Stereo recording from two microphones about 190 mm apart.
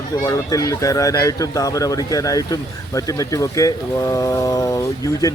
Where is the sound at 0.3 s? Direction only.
20° left (ahead or behind).